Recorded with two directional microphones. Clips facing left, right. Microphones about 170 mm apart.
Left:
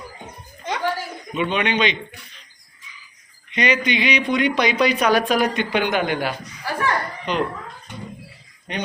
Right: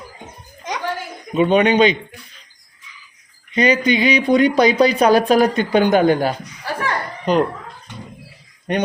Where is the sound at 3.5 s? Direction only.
35° right (ahead or behind).